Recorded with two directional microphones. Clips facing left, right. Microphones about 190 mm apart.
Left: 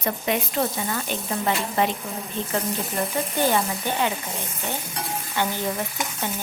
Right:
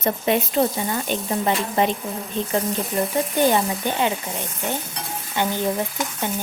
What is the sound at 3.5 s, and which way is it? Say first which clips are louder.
Speech: right 3 dB; 15° right (ahead or behind).